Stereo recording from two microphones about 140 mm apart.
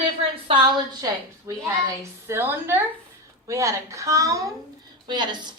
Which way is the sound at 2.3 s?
15° right (ahead or behind).